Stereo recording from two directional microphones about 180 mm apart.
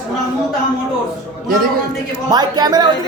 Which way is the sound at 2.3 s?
20° right (ahead or behind).